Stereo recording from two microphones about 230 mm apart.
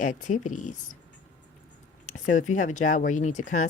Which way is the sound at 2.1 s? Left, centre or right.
Left.